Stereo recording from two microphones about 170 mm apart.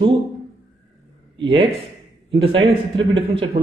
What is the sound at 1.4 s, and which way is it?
Speech, 30° right (ahead or behind).